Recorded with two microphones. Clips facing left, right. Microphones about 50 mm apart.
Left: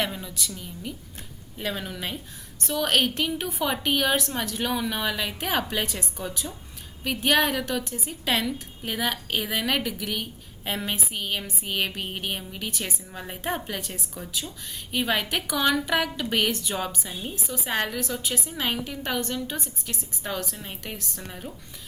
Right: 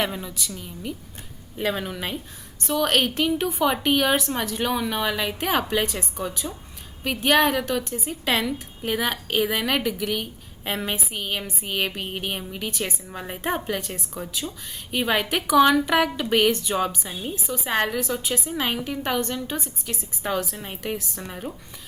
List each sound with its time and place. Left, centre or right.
0.1 s a woman's voice: centre
21.2 s a woman's voice: right